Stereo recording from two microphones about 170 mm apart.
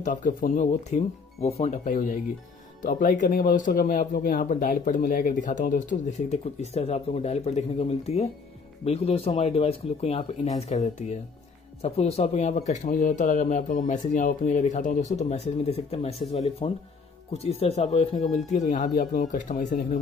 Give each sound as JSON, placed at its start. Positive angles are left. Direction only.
{"t": 0.0, "sound": "speech", "side_deg": 50}